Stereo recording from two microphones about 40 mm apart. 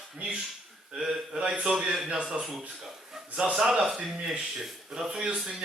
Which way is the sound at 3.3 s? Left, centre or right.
Right.